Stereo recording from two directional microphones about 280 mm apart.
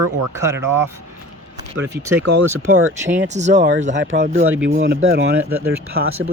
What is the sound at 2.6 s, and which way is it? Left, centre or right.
Speech, right.